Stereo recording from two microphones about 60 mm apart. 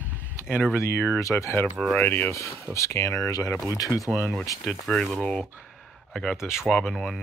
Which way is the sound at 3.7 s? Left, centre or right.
Left.